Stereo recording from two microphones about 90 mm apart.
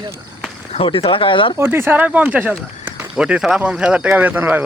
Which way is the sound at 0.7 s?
90° left.